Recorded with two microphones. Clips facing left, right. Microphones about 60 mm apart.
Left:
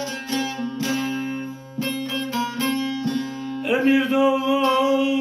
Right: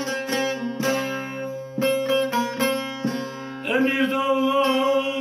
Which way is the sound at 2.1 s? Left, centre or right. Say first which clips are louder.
Right 4 dB; right.